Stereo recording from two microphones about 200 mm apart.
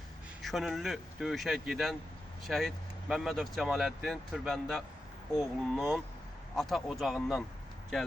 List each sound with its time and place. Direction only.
0.4 s speech: centre (ahead or behind)